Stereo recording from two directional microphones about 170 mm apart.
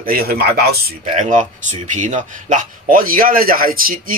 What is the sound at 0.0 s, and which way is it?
Speech, 60° right (ahead or behind).